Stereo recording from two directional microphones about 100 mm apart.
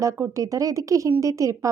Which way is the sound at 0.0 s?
30° right (ahead or behind).